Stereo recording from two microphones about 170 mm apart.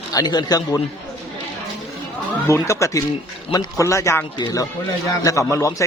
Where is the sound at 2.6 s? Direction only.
20° left (ahead or behind).